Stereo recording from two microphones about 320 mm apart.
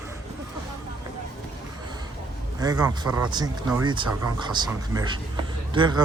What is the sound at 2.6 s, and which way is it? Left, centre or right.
Speech, centre.